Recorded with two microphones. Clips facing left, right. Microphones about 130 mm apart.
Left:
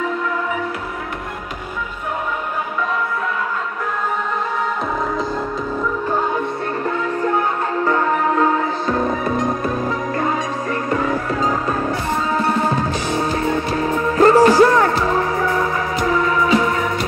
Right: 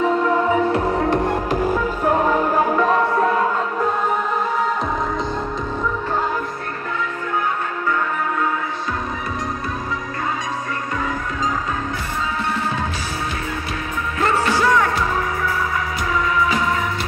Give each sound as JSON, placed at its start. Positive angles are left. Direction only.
{"t": 2.8, "sound": "music", "side_deg": -40}
{"t": 14.1, "sound": "music", "side_deg": 35}